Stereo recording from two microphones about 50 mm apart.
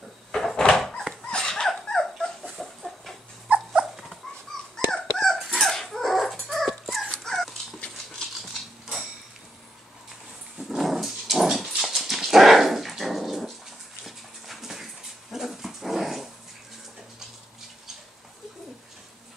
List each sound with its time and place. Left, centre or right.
0.3 s a sound: centre
1.3 s dog: centre
2.5 s chicken: centre
3.4 s dog: right
4.5 s dog: centre
10.8 s dog: centre